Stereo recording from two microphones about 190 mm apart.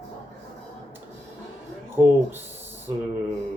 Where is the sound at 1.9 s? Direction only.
10° right (ahead or behind).